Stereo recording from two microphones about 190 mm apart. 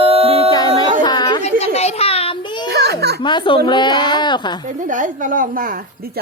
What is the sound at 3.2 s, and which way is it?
Speech, 25° left (ahead or behind).